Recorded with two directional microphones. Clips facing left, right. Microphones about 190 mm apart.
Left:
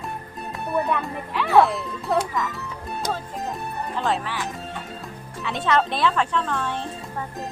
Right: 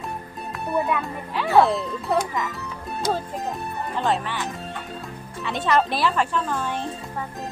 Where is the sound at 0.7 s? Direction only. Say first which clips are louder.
Even; centre (ahead or behind).